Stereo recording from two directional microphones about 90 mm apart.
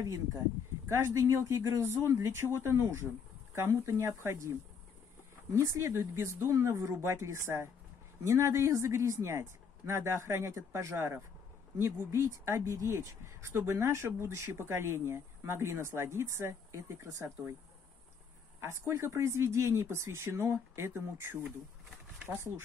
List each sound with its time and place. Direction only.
0.8 s speech: 30° right (ahead or behind)
5.6 s speech: 35° right (ahead or behind)
18.6 s speech: 30° right (ahead or behind)